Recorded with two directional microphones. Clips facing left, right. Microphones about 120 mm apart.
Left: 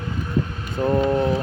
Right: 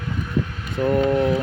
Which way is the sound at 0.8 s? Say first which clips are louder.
Right 1 dB; 25° left (ahead or behind).